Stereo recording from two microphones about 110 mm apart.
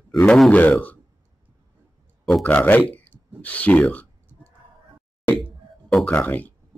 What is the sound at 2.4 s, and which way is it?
Speech, 15° left (ahead or behind).